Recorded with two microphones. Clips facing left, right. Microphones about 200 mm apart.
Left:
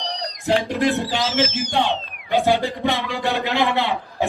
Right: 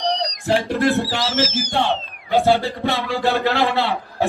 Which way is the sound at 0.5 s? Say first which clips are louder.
Even; 15° left (ahead or behind).